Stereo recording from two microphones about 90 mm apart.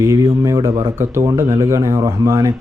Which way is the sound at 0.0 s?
40° right (ahead or behind).